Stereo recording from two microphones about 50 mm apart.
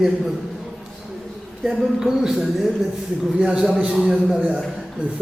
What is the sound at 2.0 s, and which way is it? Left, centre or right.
Speech, centre.